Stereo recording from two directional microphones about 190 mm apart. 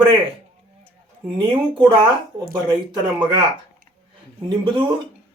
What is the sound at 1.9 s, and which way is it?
Speech, 25° right (ahead or behind).